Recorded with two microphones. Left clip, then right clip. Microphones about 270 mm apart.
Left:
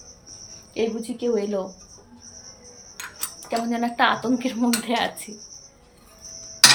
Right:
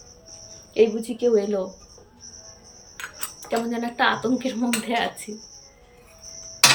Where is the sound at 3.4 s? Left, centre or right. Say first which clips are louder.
Left 1 dB; centre.